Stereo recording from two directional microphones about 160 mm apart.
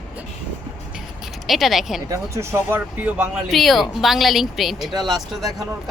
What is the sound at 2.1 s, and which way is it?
A woman's voice, 15° right (ahead or behind).